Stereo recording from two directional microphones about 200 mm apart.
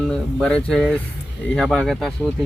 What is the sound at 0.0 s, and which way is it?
Speech, 5° left (ahead or behind).